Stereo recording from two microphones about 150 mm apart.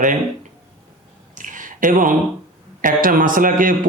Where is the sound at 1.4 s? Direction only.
60° right (ahead or behind).